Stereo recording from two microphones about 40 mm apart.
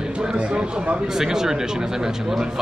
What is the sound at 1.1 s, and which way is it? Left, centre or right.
Speech, centre.